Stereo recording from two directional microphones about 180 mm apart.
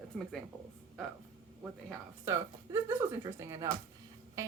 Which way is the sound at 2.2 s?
15° right (ahead or behind).